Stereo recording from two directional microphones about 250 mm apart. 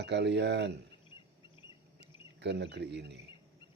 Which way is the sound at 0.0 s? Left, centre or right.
Right.